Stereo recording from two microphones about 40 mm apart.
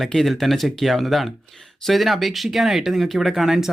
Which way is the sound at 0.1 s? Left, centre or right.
Centre.